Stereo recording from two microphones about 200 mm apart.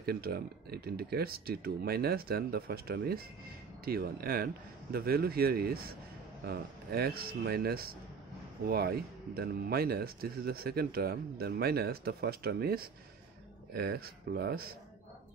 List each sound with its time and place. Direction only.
0.0 s speech: 50° right (ahead or behind)